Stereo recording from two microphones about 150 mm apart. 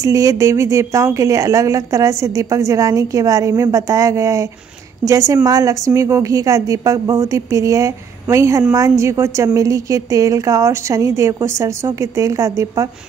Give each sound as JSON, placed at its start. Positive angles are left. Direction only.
{"t": 0.0, "sound": "a woman's voice", "side_deg": -20}